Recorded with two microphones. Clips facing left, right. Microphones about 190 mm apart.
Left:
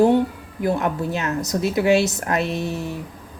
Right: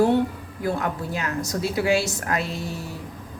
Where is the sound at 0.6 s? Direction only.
25° left (ahead or behind).